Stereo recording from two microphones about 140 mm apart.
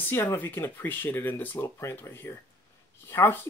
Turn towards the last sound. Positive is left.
turn(degrees=15)  # may be behind; listen again after turning